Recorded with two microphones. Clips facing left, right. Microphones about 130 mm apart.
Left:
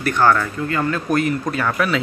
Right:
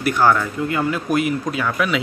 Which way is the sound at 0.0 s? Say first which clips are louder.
Even; 10° right (ahead or behind).